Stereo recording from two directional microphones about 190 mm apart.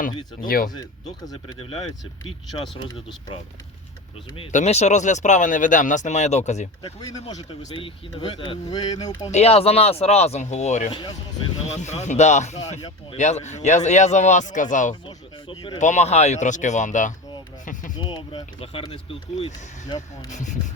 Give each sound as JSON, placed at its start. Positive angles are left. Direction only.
{"t": 0.4, "sound": "speech", "side_deg": 50}
{"t": 1.2, "sound": "speech", "side_deg": 20}
{"t": 4.5, "sound": "speech", "side_deg": 35}
{"t": 9.3, "sound": "speech", "side_deg": 35}
{"t": 15.0, "sound": "speech", "side_deg": 25}
{"t": 15.8, "sound": "speech", "side_deg": 40}
{"t": 18.0, "sound": "speech", "side_deg": 25}
{"t": 19.4, "sound": "speech", "side_deg": 40}